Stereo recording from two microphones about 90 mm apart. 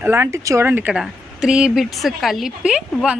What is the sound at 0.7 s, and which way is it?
Speech, 20° right (ahead or behind).